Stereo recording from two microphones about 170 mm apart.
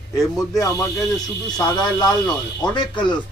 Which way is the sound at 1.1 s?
25° left (ahead or behind).